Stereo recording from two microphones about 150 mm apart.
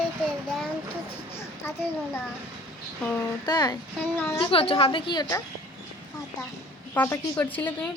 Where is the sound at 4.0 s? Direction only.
15° left (ahead or behind).